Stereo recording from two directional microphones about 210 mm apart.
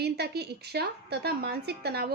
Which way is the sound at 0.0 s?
50° right (ahead or behind).